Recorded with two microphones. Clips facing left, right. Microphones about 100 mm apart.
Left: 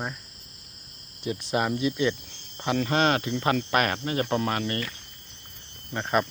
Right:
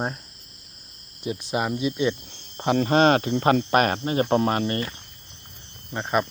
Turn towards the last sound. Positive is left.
turn(degrees=-10)  # may be behind; listen again after turning